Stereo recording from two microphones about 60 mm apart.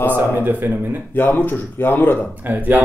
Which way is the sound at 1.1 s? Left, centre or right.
Left.